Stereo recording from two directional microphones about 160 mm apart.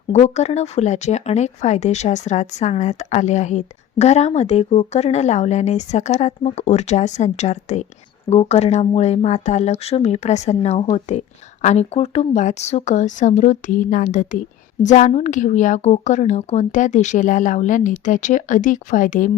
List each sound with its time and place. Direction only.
0.1 s speech: 45° left (ahead or behind)